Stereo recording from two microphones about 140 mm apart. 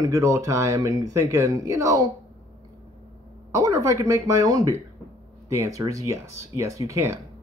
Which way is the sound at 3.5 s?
20° right (ahead or behind).